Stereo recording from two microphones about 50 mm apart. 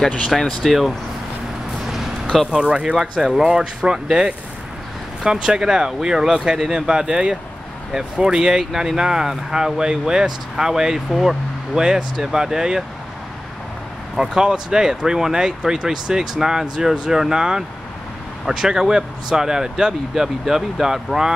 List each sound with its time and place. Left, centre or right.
0.3 s speech: centre
2.5 s speech: centre
3.0 s speech: centre
14.1 s speech: centre